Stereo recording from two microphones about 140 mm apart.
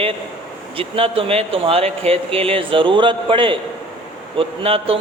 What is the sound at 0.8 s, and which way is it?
A man's voice, 40° right (ahead or behind).